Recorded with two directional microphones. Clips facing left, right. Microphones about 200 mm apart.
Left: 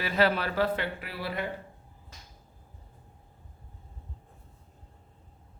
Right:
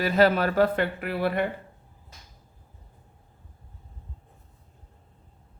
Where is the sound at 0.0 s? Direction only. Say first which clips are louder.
Right 6 dB; 45° right (ahead or behind).